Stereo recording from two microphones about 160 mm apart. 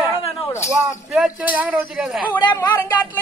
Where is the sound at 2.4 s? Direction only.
25° left (ahead or behind).